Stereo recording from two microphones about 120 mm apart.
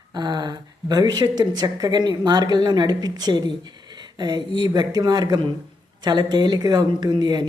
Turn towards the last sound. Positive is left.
turn(degrees=-35)  # may be behind; listen again after turning